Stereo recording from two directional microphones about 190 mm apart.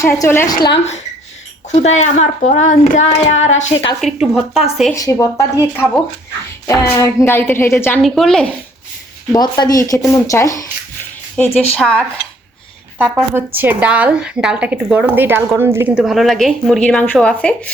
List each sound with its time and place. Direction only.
0.0 s a woman's voice: 15° left (ahead or behind)
1.7 s speech: 35° left (ahead or behind)
4.0 s a woman's voice: centre (ahead or behind)
4.9 s a woman's voice: 15° left (ahead or behind)
8.0 s a woman's voice: centre (ahead or behind)
9.3 s a woman's voice: 20° left (ahead or behind)
11.3 s a woman's voice: 5° left (ahead or behind)
13.0 s a woman's voice: 10° right (ahead or behind)